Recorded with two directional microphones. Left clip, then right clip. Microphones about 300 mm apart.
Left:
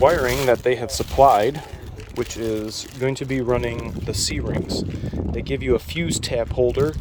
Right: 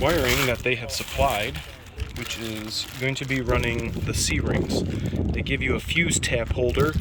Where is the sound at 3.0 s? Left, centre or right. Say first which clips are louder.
Left 5 dB; centre.